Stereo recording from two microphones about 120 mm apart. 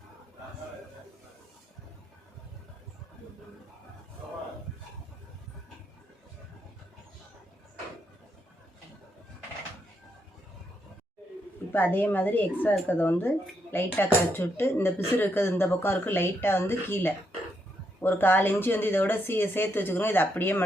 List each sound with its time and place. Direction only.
11.7 s speech: 15° left (ahead or behind)